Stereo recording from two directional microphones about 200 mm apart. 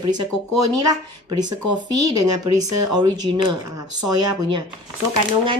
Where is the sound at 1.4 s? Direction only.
20° right (ahead or behind).